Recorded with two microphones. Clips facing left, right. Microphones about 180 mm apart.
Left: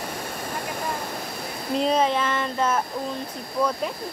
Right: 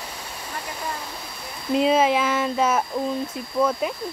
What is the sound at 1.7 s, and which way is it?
Speech, 5° right (ahead or behind).